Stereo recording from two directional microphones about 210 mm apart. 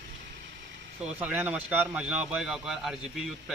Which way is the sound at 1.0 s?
5° right (ahead or behind).